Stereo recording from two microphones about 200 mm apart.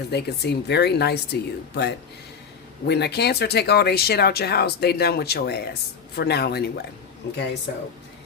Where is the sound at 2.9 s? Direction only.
55° left (ahead or behind).